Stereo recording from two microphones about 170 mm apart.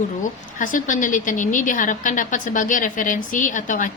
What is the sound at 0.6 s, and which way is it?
A woman's voice, 50° left (ahead or behind).